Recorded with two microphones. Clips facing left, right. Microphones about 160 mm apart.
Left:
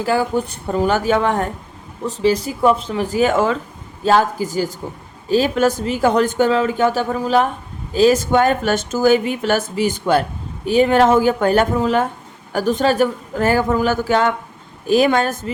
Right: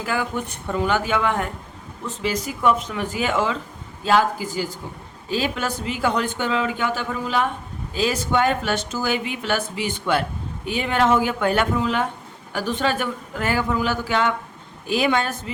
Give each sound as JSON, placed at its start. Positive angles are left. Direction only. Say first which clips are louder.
{"t": 0.0, "sound": "speech", "louder": "left 7 dB", "side_deg": 35}